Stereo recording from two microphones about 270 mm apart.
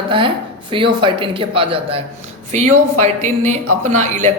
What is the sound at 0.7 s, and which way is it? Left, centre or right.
A man's voice, centre.